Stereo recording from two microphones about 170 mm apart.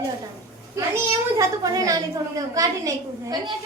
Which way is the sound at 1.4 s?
20° right (ahead or behind).